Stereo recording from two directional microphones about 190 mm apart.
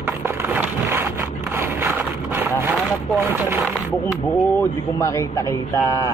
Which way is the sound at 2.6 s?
10° right (ahead or behind).